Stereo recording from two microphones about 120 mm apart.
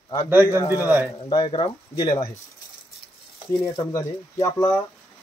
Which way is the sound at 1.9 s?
30° left (ahead or behind).